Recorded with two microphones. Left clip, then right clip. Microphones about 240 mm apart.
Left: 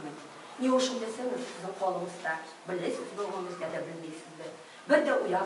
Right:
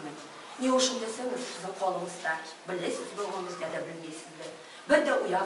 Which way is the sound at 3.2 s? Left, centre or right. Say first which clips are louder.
Even; left.